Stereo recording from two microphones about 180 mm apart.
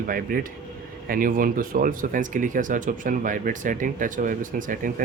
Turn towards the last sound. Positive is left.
turn(degrees=-50)  # may be behind; listen again after turning